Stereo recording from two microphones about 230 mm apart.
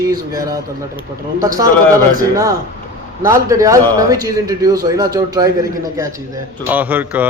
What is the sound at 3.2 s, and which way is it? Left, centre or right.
Speech, centre.